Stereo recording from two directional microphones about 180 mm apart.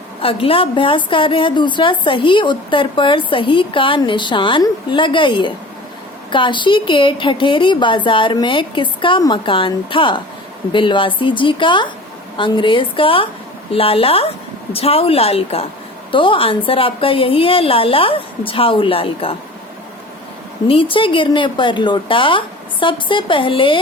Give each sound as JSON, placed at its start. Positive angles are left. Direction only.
{"t": 0.2, "sound": "a woman's voice", "side_deg": 30}
{"t": 20.7, "sound": "a woman's voice", "side_deg": 30}